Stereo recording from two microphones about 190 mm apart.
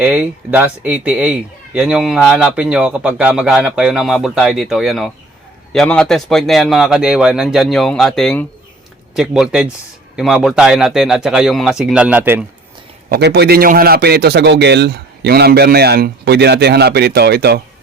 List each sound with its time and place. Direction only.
0.0 s speech: 10° right (ahead or behind)
13.1 s a man's voice: 60° right (ahead or behind)